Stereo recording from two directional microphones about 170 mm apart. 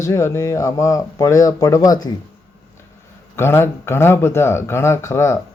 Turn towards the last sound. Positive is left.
turn(degrees=15)  # may be behind; listen again after turning